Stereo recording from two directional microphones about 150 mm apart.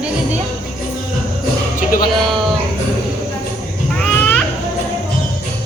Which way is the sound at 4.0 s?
10° left (ahead or behind).